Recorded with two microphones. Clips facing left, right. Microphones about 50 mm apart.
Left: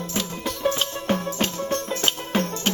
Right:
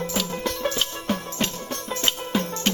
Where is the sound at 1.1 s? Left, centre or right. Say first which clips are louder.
Left 4 dB; left.